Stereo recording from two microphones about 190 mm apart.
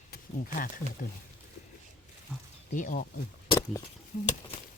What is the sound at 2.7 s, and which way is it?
Speech, 45° left (ahead or behind).